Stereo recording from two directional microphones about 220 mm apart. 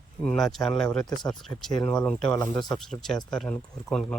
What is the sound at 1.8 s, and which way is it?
Speech, 20° left (ahead or behind).